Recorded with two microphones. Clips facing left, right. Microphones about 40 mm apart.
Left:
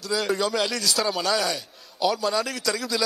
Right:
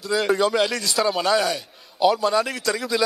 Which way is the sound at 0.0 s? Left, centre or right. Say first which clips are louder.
Right 4 dB; centre.